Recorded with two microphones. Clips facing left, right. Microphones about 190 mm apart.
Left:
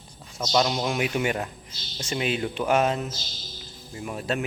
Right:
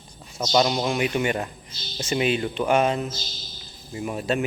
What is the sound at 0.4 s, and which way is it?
Speech, 5° right (ahead or behind).